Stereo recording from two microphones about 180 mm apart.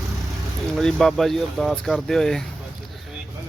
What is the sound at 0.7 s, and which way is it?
Speech, centre (ahead or behind).